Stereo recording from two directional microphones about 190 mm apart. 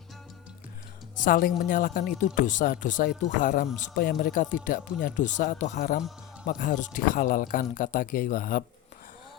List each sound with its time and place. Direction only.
1.1 s speech: 45° left (ahead or behind)